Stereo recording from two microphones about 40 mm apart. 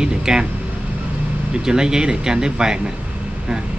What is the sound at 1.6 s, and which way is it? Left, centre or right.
Speech, centre.